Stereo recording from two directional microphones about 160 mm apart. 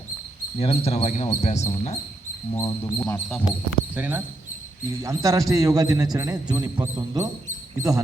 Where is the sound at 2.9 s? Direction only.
15° left (ahead or behind).